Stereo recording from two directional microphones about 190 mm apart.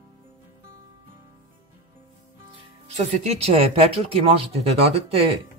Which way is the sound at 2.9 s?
35° right (ahead or behind).